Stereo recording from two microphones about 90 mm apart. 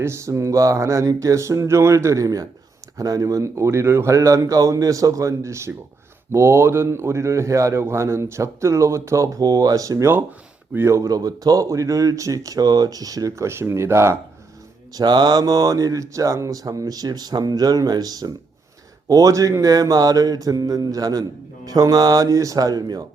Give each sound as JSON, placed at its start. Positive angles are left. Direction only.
{"t": 0.0, "sound": "a man's voice", "side_deg": -30}
{"t": 14.9, "sound": "speech", "side_deg": -50}